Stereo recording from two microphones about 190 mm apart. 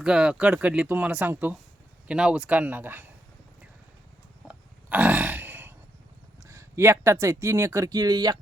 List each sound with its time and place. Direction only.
0.0 s speech: 5° right (ahead or behind)
4.4 s burping: 5° right (ahead or behind)
6.4 s speech: 15° right (ahead or behind)